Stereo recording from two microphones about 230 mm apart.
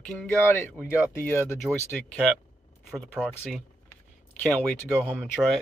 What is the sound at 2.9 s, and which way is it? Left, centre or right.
Speech, centre.